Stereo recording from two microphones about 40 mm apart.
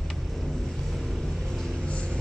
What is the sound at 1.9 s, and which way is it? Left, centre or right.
Music, left.